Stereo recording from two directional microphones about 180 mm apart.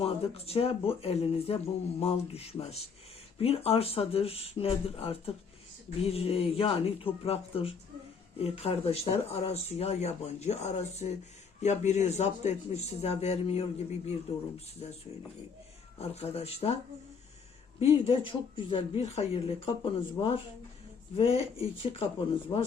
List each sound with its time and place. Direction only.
0.0 s speech: 35° left (ahead or behind)
16.0 s speech: 35° left (ahead or behind)
17.7 s speech: 30° left (ahead or behind)